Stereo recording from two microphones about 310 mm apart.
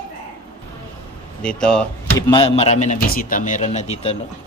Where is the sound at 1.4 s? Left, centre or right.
Centre.